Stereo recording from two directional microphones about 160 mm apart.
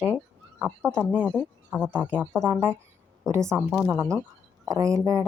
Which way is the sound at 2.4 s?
15° right (ahead or behind).